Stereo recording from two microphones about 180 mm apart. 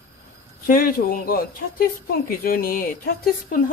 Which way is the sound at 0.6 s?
50° left (ahead or behind).